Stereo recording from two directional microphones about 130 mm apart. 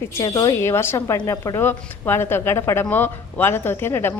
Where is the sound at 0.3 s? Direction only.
30° left (ahead or behind).